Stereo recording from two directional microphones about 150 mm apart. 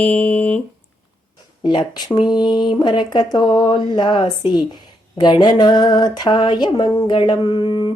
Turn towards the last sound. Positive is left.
turn(degrees=30)  # may be behind; listen again after turning